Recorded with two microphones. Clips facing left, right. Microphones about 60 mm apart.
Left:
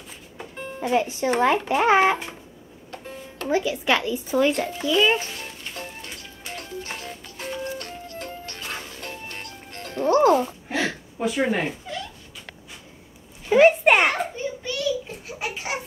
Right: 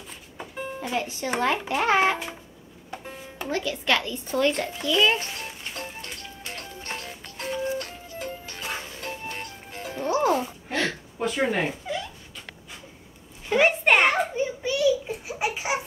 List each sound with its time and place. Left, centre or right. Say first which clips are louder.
0.7 s a child's voice: left 8 dB; centre
2.9 s music: even; centre
3.4 s a child's voice: left 4 dB; centre
5.5 s music: even; centre
13.5 s a sound: left 5 dB; centre
14.3 s a sound: right 3 dB; centre